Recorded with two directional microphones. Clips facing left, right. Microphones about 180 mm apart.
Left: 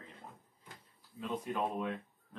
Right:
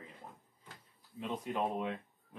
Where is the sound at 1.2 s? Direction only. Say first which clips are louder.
Even; 20° right (ahead or behind).